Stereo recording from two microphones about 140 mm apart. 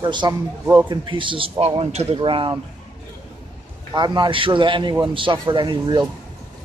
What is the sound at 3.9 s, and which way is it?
A man's voice, 30° right (ahead or behind).